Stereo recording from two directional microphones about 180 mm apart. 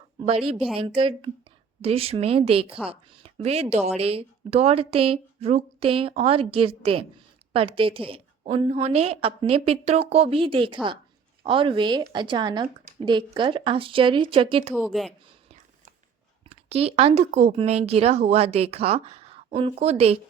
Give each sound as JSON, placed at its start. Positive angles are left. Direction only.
{"t": 0.8, "sound": "speech", "side_deg": -30}
{"t": 14.7, "sound": "speech", "side_deg": 0}
{"t": 16.5, "sound": "speech", "side_deg": -35}